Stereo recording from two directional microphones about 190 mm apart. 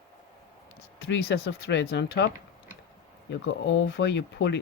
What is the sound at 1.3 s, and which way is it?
Speech, 70° left (ahead or behind).